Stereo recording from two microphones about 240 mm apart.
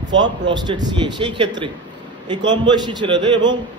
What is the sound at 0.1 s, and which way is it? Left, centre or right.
A man's voice, centre.